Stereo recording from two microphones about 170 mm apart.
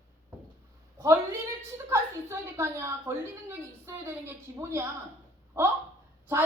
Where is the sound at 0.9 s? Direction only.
20° right (ahead or behind).